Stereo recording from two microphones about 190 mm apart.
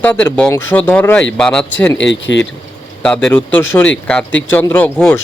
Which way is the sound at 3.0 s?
5° left (ahead or behind).